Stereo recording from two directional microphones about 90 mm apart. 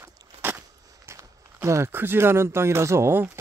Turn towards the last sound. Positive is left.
turn(degrees=-30)  # may be behind; listen again after turning